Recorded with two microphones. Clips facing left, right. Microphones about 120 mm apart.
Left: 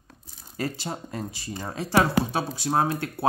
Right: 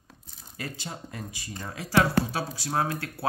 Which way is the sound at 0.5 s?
35° left (ahead or behind).